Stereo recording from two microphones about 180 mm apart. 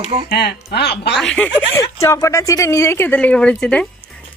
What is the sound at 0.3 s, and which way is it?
Speech, 65° left (ahead or behind).